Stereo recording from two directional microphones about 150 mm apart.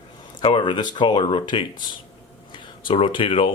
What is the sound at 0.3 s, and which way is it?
Speech, 35° left (ahead or behind).